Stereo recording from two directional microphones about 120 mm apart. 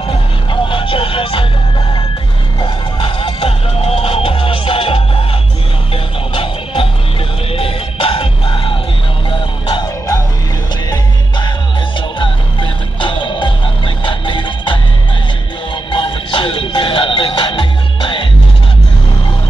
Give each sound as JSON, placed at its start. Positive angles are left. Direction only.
{"t": 0.5, "sound": "vehicle", "side_deg": 45}
{"t": 2.6, "sound": "music", "side_deg": 40}
{"t": 6.3, "sound": "music", "side_deg": 45}